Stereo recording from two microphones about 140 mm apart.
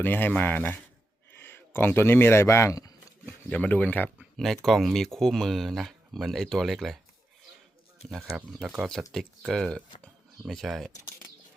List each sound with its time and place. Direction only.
0.0 s speech: 15° left (ahead or behind)
3.2 s speech: 10° left (ahead or behind)
4.4 s speech: centre (ahead or behind)
8.2 s speech: 10° right (ahead or behind)
9.1 s speech: centre (ahead or behind)